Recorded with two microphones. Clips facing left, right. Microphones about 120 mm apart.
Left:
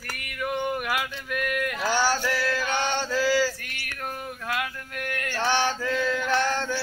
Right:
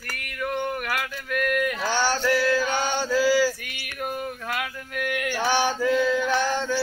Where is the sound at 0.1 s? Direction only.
5° left (ahead or behind).